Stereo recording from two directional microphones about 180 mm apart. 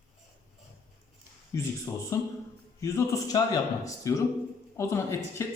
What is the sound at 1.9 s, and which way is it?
A man's voice, 20° left (ahead or behind).